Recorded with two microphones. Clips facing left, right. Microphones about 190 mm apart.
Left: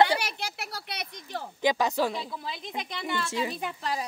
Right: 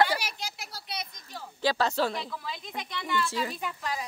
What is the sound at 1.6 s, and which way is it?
Speech, 15° left (ahead or behind).